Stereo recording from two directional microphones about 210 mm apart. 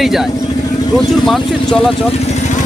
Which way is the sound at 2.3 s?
35° left (ahead or behind).